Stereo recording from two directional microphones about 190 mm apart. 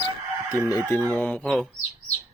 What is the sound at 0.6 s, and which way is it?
Speech, 15° left (ahead or behind).